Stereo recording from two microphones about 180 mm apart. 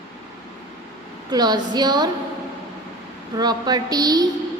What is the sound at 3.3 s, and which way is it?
Speech, 20° right (ahead or behind).